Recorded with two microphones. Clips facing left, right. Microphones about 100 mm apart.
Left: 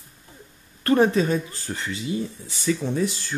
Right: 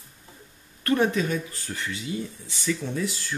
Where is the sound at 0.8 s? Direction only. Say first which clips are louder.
Left 4 dB; 30° left (ahead or behind).